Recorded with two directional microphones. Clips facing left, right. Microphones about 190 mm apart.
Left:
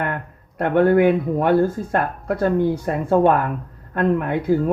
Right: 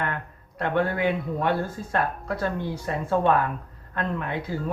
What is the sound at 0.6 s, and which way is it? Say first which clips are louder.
Speech: left 9 dB; 50° left (ahead or behind).